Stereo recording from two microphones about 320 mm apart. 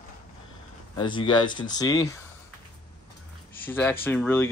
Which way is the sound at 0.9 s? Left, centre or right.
Centre.